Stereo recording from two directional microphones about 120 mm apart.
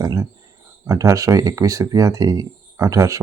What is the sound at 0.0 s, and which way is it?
Speech, 30° right (ahead or behind).